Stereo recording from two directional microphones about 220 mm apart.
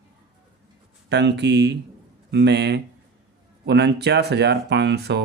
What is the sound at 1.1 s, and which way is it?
Speech, 50° right (ahead or behind).